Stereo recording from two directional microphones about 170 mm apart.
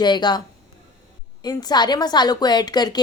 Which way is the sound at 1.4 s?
25° left (ahead or behind).